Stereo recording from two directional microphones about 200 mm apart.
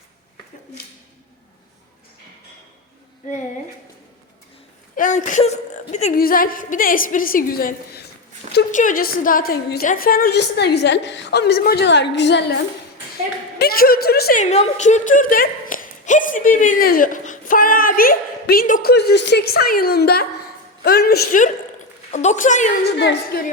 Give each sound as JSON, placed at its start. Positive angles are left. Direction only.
{"t": 4.9, "sound": "speech", "side_deg": 40}
{"t": 6.1, "sound": "a woman's voice", "side_deg": 45}
{"t": 13.6, "sound": "a woman's voice", "side_deg": 50}
{"t": 14.4, "sound": "a woman's voice", "side_deg": 35}
{"t": 22.1, "sound": "a woman's voice", "side_deg": 35}
{"t": 22.8, "sound": "a woman's voice", "side_deg": 60}